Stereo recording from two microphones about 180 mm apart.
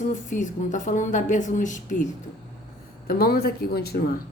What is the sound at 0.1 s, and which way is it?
Speech, 45° left (ahead or behind).